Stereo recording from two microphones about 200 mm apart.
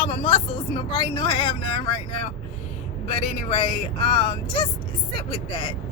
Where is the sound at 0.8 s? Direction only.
25° left (ahead or behind).